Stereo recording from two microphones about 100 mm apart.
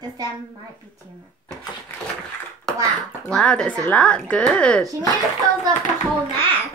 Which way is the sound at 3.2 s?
5° left (ahead or behind).